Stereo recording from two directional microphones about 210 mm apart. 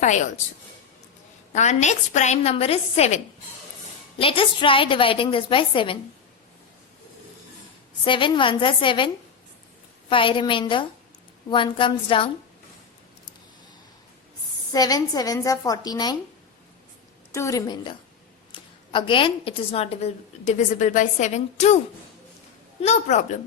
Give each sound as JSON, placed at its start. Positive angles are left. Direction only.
{"t": 0.0, "sound": "a woman's voice", "side_deg": 35}
{"t": 1.5, "sound": "a woman's voice", "side_deg": 35}
{"t": 4.2, "sound": "a woman's voice", "side_deg": 25}
{"t": 8.0, "sound": "a woman's voice", "side_deg": 25}
{"t": 10.1, "sound": "a woman's voice", "side_deg": 25}
{"t": 14.7, "sound": "a woman's voice", "side_deg": 20}
{"t": 17.3, "sound": "a woman's voice", "side_deg": 15}
{"t": 22.8, "sound": "a woman's voice", "side_deg": 30}